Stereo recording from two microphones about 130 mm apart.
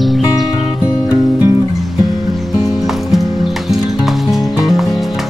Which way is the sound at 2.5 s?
5° right (ahead or behind).